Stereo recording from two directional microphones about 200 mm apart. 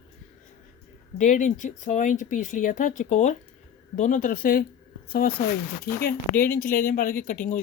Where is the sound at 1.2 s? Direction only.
40° left (ahead or behind).